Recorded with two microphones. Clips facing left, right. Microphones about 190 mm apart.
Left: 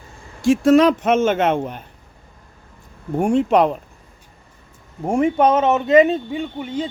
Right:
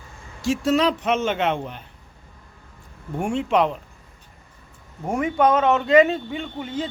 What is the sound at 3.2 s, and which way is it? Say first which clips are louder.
Speech: left 5 dB; 40° left (ahead or behind).